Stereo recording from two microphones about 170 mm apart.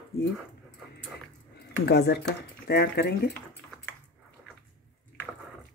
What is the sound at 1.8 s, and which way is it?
Speech, 75° left (ahead or behind).